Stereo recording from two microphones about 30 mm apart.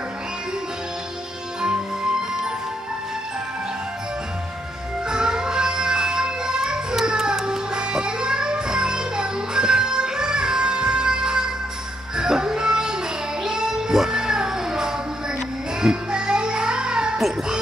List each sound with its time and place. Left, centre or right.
5.0 s music: right